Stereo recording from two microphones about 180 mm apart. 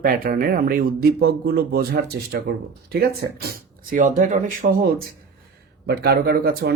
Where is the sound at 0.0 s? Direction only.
50° right (ahead or behind).